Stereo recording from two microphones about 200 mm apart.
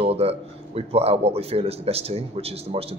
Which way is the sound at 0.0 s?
30° right (ahead or behind).